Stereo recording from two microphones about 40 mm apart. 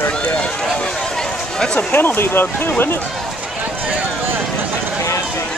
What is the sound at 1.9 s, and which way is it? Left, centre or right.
Speech, left.